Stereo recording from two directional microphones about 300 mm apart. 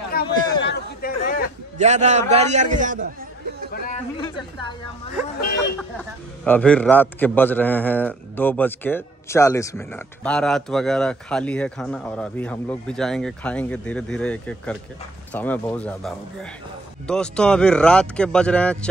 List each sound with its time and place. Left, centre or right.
0.1 s chatter: left
1.8 s a man's voice: right
3.7 s chatter: left
4.2 s a woman's voice: centre
6.4 s a man's voice: centre